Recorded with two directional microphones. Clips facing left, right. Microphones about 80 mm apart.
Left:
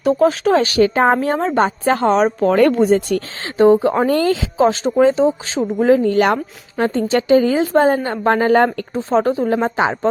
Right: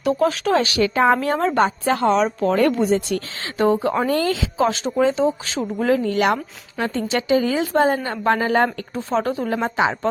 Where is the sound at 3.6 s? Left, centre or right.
Left.